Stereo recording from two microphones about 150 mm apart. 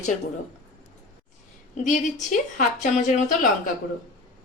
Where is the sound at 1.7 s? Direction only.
55° left (ahead or behind).